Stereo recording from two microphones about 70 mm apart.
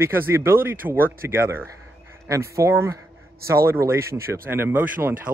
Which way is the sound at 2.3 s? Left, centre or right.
Right.